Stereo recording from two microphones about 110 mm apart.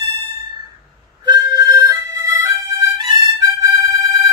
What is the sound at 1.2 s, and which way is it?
Harmonica, 35° right (ahead or behind).